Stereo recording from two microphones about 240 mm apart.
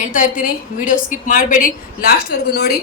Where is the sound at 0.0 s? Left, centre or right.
Left.